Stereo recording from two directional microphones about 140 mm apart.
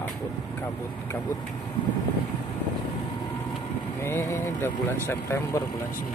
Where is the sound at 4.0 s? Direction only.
20° left (ahead or behind).